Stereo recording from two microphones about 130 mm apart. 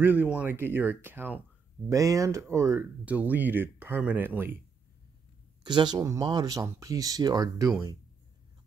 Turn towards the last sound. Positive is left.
turn(degrees=-30)  # may be behind; listen again after turning